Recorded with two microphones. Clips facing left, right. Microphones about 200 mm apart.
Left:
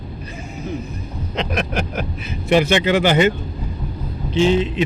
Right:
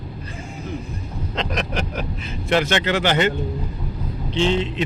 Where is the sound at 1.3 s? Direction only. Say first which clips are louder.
Left 3 dB; 5° left (ahead or behind).